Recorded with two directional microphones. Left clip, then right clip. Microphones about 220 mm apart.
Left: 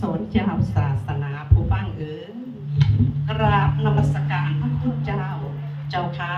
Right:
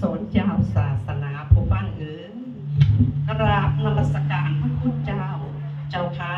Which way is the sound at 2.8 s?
30° left (ahead or behind).